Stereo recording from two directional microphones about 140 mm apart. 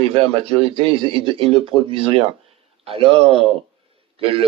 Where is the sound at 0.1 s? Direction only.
45° right (ahead or behind).